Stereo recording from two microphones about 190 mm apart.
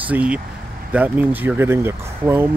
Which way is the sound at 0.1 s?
5° right (ahead or behind).